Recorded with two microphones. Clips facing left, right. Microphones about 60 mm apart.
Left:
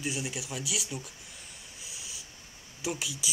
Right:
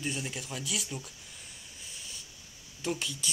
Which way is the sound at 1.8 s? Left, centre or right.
Centre.